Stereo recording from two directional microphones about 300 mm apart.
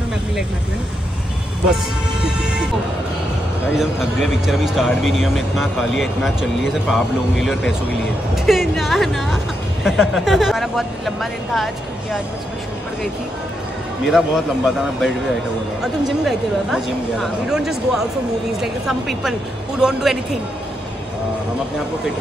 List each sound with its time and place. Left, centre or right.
3.7 s speech: centre
14.0 s speech: centre